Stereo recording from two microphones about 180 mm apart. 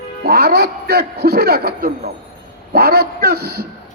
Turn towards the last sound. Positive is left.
turn(degrees=-60)  # may be behind; listen again after turning